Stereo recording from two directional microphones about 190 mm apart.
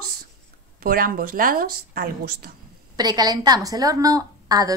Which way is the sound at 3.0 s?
20° right (ahead or behind).